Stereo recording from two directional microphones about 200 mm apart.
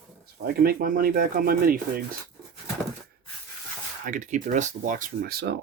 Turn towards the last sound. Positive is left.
turn(degrees=-50)  # may be behind; listen again after turning